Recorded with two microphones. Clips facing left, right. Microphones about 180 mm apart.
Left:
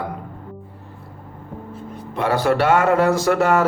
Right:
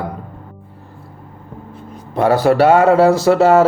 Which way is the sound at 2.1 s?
40° right (ahead or behind).